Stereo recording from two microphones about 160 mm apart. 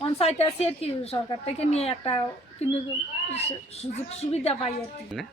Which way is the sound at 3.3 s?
40° left (ahead or behind).